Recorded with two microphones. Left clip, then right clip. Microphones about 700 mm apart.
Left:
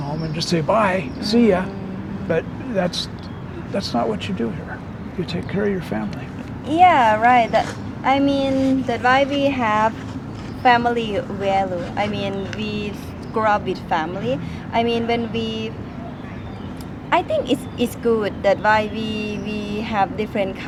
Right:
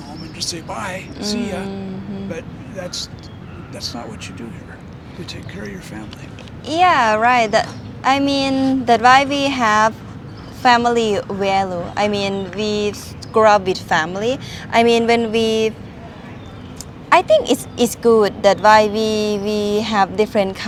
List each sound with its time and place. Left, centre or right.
0.3 s speech: left
5.3 s speech: left
6.7 s a woman's voice: right
17.1 s a woman's voice: right